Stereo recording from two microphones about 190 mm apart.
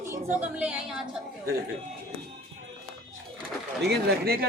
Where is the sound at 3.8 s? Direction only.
60° right (ahead or behind).